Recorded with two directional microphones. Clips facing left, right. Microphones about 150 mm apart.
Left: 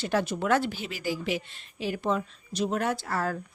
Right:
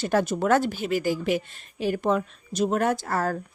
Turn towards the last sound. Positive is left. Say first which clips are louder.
# right 4 dB
turn(degrees=-45)  # may be behind; listen again after turning